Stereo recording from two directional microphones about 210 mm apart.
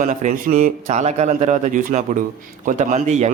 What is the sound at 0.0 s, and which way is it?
A man's voice, 35° right (ahead or behind).